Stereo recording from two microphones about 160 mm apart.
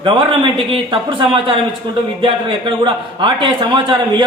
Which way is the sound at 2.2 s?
30° right (ahead or behind).